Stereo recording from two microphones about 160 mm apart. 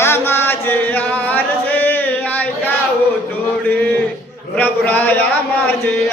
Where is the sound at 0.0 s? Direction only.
15° left (ahead or behind).